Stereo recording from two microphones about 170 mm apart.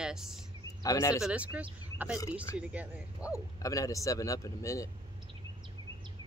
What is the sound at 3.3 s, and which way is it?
Speech, 20° left (ahead or behind).